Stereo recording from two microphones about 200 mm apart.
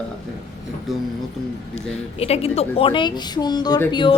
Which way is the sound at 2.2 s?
30° left (ahead or behind).